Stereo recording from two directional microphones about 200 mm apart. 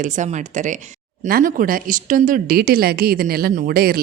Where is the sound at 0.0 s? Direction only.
40° right (ahead or behind).